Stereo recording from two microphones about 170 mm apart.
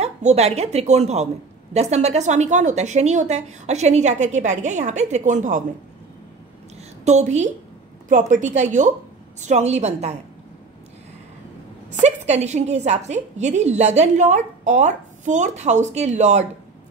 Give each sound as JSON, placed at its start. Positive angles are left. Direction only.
{"t": 0.0, "sound": "a woman's voice", "side_deg": -40}
{"t": 7.1, "sound": "a woman's voice", "side_deg": -45}
{"t": 11.9, "sound": "a woman's voice", "side_deg": -40}